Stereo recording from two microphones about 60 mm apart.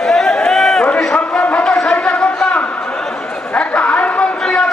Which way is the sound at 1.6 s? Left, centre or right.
Centre.